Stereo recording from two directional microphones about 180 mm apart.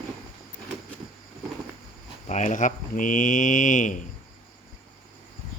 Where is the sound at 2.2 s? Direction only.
40° left (ahead or behind).